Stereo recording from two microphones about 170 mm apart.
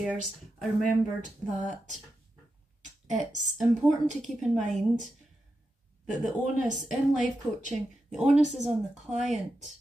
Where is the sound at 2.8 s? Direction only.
45° right (ahead or behind).